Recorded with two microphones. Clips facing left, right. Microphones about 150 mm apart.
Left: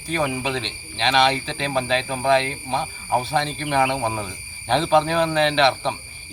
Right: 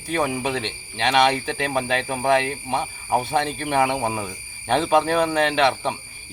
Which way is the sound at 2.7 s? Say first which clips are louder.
Even; 15° right (ahead or behind).